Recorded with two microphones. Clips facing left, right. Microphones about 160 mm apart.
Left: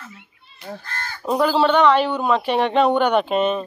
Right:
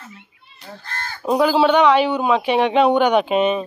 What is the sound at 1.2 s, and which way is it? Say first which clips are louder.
A man's voice: right 2 dB; 10° right (ahead or behind).